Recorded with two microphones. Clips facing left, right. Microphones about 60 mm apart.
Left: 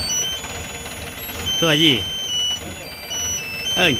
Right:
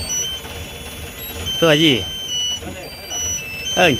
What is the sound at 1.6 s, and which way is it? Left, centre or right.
Speech, right.